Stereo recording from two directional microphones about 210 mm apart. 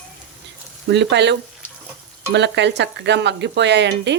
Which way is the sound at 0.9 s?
55° right (ahead or behind).